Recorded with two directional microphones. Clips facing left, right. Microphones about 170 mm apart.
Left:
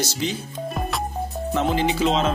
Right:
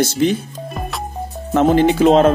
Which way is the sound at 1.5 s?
55° right (ahead or behind).